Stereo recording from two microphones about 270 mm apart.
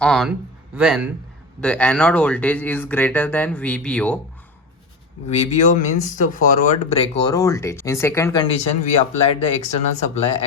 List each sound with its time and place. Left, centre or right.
0.0 s a man's voice: centre
5.3 s speech: left